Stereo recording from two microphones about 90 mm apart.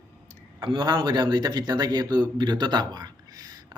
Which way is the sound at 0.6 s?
65° right (ahead or behind).